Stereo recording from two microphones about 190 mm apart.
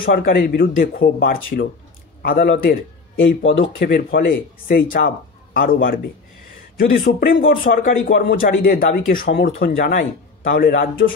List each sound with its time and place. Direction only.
0.1 s a man's voice: 50° left (ahead or behind)